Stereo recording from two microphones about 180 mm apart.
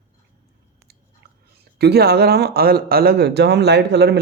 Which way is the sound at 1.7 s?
65° right (ahead or behind).